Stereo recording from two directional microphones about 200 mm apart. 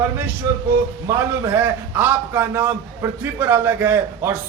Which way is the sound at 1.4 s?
10° right (ahead or behind).